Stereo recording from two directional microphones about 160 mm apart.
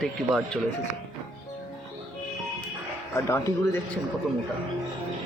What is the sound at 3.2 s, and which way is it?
Speech, 15° left (ahead or behind).